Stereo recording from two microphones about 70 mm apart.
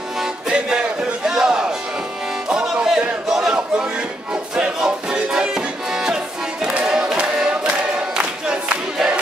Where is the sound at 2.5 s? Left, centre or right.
Centre.